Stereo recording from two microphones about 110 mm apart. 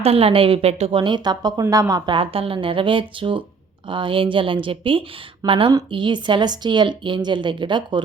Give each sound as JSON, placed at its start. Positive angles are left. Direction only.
{"t": 0.0, "sound": "a woman's voice", "side_deg": -65}
{"t": 0.9, "sound": "speech", "side_deg": -50}
{"t": 2.0, "sound": "speech", "side_deg": -55}